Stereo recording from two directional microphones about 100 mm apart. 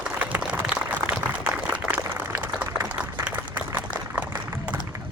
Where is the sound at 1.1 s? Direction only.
15° right (ahead or behind).